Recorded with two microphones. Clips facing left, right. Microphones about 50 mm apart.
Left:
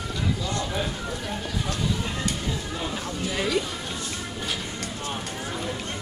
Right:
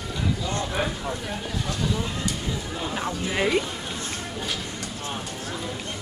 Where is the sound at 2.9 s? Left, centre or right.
Right.